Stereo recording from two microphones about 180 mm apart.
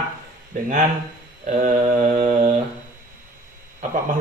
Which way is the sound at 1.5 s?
45° right (ahead or behind).